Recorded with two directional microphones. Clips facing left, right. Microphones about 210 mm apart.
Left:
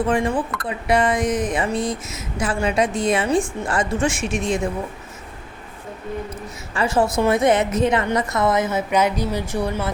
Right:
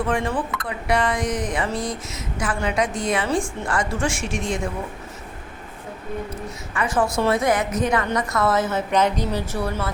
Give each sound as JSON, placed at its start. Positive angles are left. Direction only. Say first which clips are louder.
{"t": 0.1, "sound": "speech", "louder": "left 3 dB", "side_deg": 20}
{"t": 6.7, "sound": "speech", "louder": "left 3 dB", "side_deg": 25}